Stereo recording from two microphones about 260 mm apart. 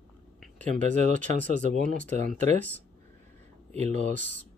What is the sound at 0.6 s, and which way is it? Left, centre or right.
Speech, right.